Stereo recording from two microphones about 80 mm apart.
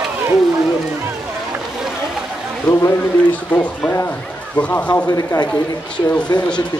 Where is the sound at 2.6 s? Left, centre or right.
Left.